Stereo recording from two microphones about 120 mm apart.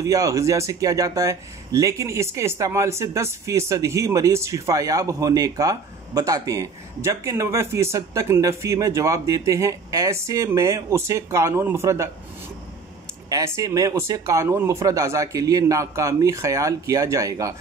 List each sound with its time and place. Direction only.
0.0 s speech: 25° right (ahead or behind)
13.3 s speech: 30° right (ahead or behind)